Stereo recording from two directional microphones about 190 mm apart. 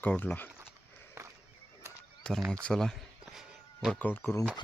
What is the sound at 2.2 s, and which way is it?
Speech, 5° left (ahead or behind).